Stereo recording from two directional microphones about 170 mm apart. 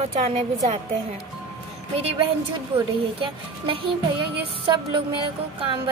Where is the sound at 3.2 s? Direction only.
30° right (ahead or behind).